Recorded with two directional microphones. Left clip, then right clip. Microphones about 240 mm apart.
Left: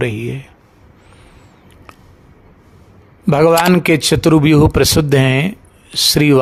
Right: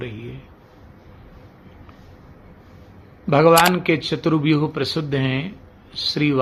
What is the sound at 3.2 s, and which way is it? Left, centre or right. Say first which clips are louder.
A man's voice: left 3 dB; left.